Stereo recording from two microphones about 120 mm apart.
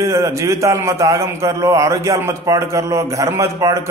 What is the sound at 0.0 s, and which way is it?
Mantra, 25° right (ahead or behind).